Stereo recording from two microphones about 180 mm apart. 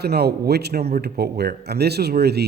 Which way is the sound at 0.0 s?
65° right (ahead or behind).